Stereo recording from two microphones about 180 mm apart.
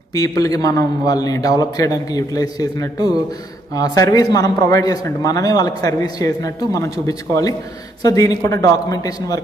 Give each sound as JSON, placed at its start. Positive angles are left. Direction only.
{"t": 0.1, "sound": "a man's voice", "side_deg": 20}